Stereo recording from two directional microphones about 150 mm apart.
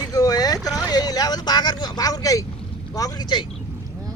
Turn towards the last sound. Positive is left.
turn(degrees=30)  # may be behind; listen again after turning